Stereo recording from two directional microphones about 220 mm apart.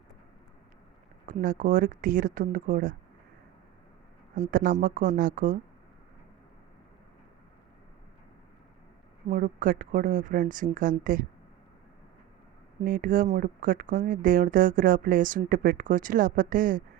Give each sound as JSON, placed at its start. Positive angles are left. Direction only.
{"t": 1.3, "sound": "speech", "side_deg": -40}
{"t": 4.4, "sound": "speech", "side_deg": -35}
{"t": 9.3, "sound": "speech", "side_deg": -40}
{"t": 12.8, "sound": "speech", "side_deg": -40}